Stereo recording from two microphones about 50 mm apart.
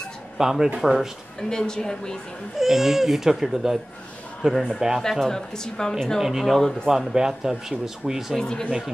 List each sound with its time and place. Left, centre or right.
0.4 s speech: centre
1.5 s a woman's voice: centre
2.6 s a man's voice: centre
5.2 s a woman's voice: centre
6.9 s speech: centre
8.4 s a woman's voice: centre